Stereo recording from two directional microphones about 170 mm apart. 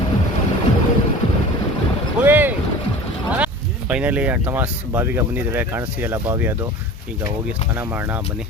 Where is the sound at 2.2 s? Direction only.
10° right (ahead or behind).